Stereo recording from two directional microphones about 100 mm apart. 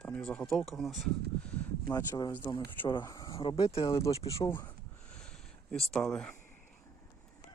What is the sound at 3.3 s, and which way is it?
Speech, 60° left (ahead or behind).